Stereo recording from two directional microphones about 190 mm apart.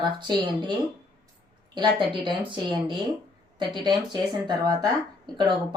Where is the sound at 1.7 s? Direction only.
25° right (ahead or behind).